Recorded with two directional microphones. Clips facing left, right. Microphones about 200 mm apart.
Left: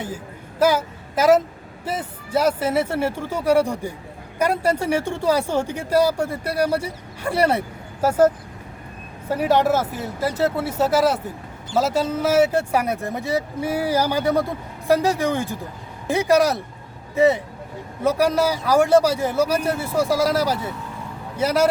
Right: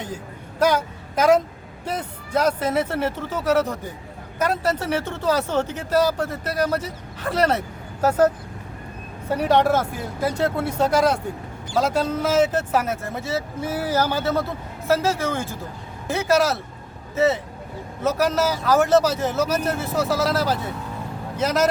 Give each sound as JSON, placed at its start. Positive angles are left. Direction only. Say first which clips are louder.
{"t": 0.6, "sound": "a woman's voice", "louder": "left 1 dB", "side_deg": 5}
{"t": 9.3, "sound": "speech", "louder": "even", "side_deg": 5}